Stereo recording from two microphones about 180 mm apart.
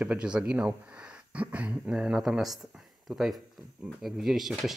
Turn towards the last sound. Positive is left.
turn(degrees=0)  # may be behind; listen again after turning